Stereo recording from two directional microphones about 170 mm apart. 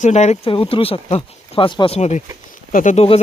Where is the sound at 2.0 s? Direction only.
40° left (ahead or behind).